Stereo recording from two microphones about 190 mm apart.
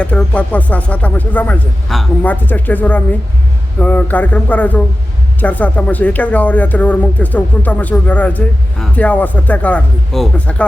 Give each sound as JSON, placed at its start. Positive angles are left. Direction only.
{"t": 0.0, "sound": "speech", "side_deg": 5}